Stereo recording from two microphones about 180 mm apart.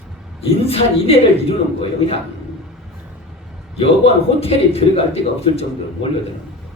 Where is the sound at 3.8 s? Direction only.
35° left (ahead or behind).